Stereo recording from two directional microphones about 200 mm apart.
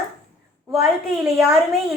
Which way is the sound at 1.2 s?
Centre (ahead or behind).